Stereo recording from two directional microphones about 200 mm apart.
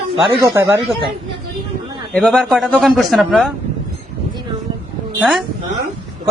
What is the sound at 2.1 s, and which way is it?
A man's voice, centre (ahead or behind).